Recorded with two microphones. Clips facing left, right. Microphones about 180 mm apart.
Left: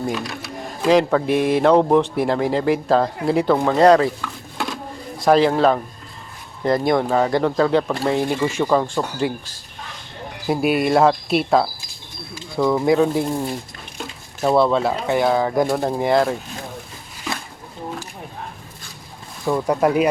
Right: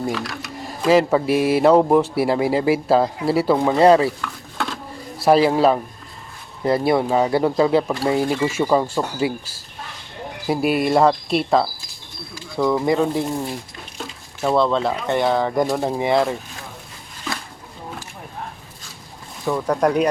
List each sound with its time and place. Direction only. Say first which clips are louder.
0.1 s speech: even; 20° left (ahead or behind)
0.8 s speech: even; 5° right (ahead or behind)
5.1 s speech: even; 5° right (ahead or behind)
19.5 s speech: left 1 dB; 10° left (ahead or behind)